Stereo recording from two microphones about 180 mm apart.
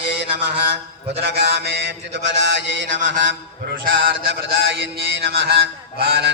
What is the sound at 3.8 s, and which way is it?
Mantra, 65° right (ahead or behind).